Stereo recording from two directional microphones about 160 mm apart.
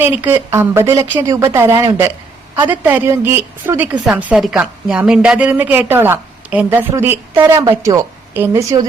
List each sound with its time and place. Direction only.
0.0 s a woman's voice: 15° right (ahead or behind)